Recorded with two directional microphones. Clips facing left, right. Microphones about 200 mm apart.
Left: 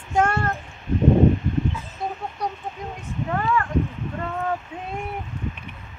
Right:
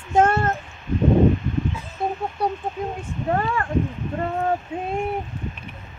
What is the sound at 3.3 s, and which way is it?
Speech, 35° right (ahead or behind).